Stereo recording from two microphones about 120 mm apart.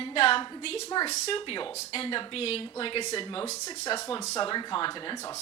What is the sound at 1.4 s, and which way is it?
Speech, 45° left (ahead or behind).